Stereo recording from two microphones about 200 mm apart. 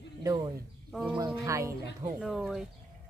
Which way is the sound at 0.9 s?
Centre (ahead or behind).